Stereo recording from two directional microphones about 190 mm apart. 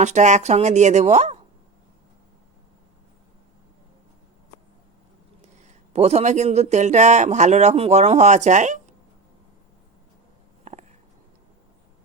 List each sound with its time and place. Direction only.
0.0 s speech: 40° right (ahead or behind)
5.4 s speech: 35° right (ahead or behind)
10.6 s a sound: 35° right (ahead or behind)